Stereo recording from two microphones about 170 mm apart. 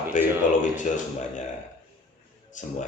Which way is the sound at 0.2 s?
50° left (ahead or behind).